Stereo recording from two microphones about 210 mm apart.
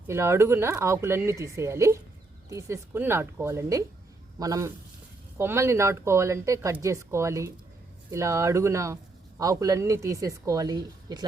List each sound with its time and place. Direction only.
0.1 s a woman's voice: 10° right (ahead or behind)